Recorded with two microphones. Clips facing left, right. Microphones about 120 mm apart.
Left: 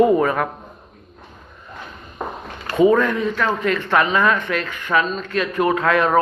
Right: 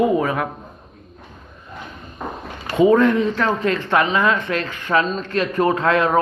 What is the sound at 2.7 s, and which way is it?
Speech, 25° right (ahead or behind).